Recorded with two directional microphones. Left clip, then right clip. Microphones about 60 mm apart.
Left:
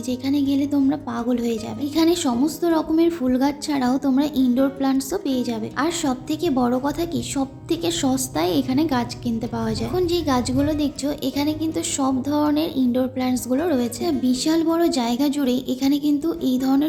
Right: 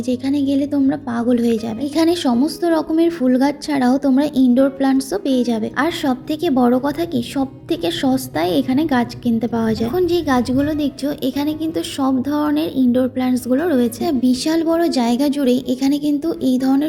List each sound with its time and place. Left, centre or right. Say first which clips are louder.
0.1 s a woman's voice: right 3 dB; right
1.8 s a woman's voice: right 2 dB; right
2.2 s a woman's voice: right 4 dB; right
4.8 s a woman's voice: right 4 dB; right
6.0 s a woman's voice: right 4 dB; right